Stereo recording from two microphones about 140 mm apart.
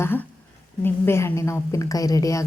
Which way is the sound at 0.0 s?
15° left (ahead or behind).